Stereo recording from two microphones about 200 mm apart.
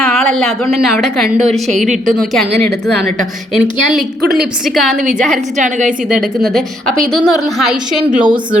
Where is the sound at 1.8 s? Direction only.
40° right (ahead or behind).